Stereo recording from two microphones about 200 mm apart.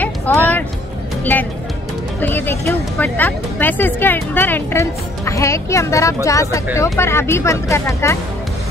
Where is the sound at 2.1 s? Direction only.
10° left (ahead or behind).